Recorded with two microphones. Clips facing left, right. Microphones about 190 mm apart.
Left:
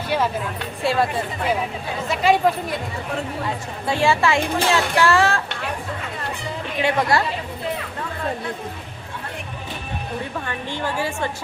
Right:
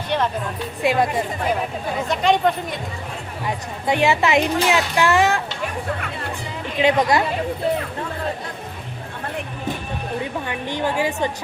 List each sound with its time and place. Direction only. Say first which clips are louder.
0.8 s a woman's voice: right 2 dB; 15° right (ahead or behind)
2.0 s speech: left 1 dB; 5° left (ahead or behind)
3.8 s speech: right 1 dB; 20° right (ahead or behind)
6.7 s speech: right 3 dB; 20° right (ahead or behind)
10.4 s a woman's voice: right 3 dB; 15° right (ahead or behind)